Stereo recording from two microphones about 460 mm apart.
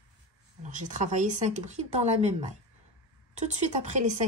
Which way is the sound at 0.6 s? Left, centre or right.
Centre.